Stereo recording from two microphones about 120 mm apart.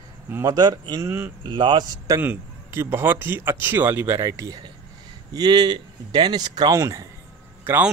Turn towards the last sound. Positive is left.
turn(degrees=-20)  # may be behind; listen again after turning